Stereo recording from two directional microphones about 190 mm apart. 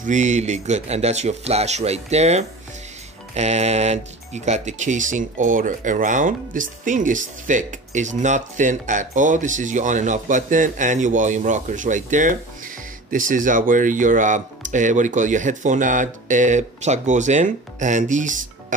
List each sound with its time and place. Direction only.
0.0 s speech: 40° right (ahead or behind)